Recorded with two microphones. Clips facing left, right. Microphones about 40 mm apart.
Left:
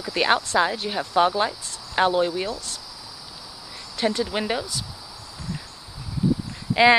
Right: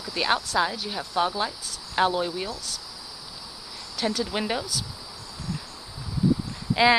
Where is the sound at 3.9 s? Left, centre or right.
Centre.